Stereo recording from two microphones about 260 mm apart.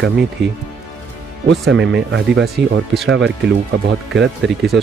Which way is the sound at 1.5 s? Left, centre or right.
Right.